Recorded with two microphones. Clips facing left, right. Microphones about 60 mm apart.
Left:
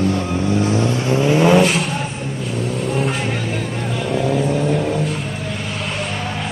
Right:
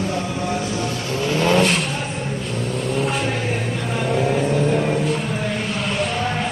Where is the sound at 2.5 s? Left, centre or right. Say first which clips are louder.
Left 3 dB; centre.